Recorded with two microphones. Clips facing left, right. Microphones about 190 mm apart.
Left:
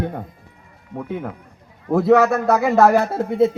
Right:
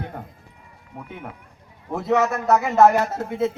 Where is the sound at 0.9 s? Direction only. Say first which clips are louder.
Left 10 dB; 90° left.